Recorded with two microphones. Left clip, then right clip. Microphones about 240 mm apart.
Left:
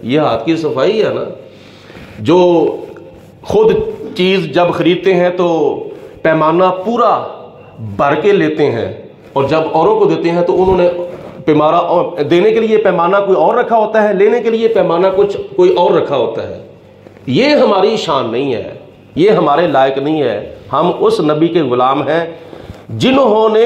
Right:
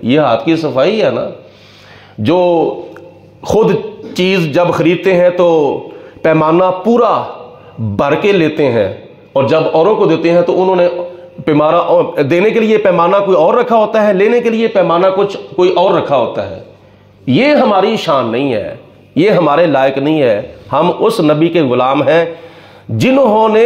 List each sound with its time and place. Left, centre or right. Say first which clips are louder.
0.0 s a man's voice: right 2 dB; right
2.2 s a man's voice: left 1 dB; right
11.4 s a man's voice: even; right